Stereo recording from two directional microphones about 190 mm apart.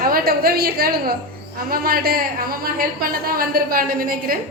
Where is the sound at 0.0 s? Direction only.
50° right (ahead or behind).